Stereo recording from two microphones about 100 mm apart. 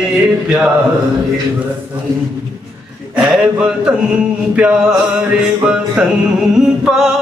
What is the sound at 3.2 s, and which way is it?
Speech, 5° right (ahead or behind).